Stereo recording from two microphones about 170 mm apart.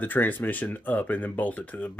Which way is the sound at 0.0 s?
10° left (ahead or behind).